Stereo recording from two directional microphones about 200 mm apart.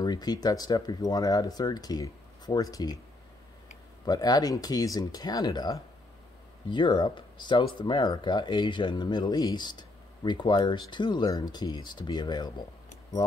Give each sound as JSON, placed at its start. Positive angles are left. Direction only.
{"t": 0.0, "sound": "speech", "side_deg": 20}
{"t": 4.0, "sound": "speech", "side_deg": 20}